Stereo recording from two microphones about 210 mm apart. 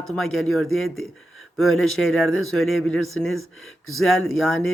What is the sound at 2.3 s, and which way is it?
Speech, 75° left (ahead or behind).